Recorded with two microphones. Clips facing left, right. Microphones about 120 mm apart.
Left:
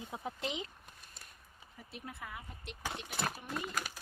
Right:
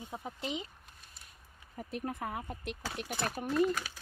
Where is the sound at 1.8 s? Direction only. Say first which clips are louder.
Right 10 dB; 50° right (ahead or behind).